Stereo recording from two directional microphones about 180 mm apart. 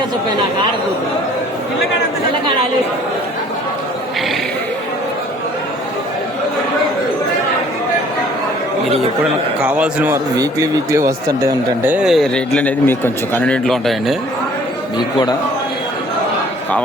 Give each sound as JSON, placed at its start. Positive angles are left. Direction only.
{"t": 9.6, "sound": "a man's voice", "side_deg": -5}
{"t": 10.3, "sound": "speech", "side_deg": -20}
{"t": 11.9, "sound": "a man's voice", "side_deg": -5}